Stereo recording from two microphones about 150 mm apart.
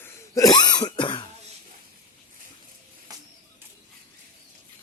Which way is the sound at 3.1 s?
25° right (ahead or behind).